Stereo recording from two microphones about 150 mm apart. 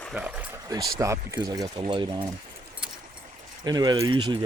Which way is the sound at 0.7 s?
25° right (ahead or behind).